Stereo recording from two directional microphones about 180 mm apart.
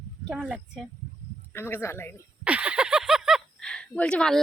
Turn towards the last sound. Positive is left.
turn(degrees=5)  # may be behind; listen again after turning